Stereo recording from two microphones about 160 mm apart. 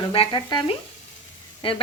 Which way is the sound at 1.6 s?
35° left (ahead or behind).